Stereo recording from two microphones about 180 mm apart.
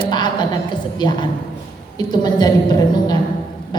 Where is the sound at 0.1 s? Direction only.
25° left (ahead or behind).